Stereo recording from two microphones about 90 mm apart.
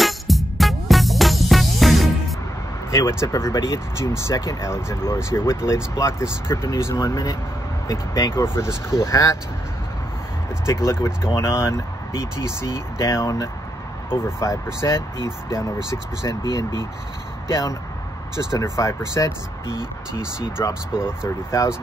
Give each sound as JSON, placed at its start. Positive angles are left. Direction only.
{"t": 0.0, "sound": "music", "side_deg": 0}
{"t": 2.9, "sound": "speech", "side_deg": 35}
{"t": 10.6, "sound": "speech", "side_deg": 30}
{"t": 17.5, "sound": "speech", "side_deg": 40}
{"t": 20.2, "sound": "speech", "side_deg": -10}
{"t": 21.5, "sound": "speech", "side_deg": 30}